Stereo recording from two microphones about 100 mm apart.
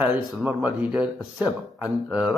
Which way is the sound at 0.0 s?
10° right (ahead or behind).